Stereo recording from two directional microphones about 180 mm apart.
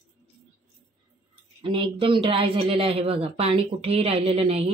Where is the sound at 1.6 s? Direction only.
30° right (ahead or behind).